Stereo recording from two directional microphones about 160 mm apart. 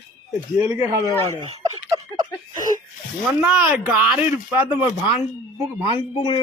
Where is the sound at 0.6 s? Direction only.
15° right (ahead or behind).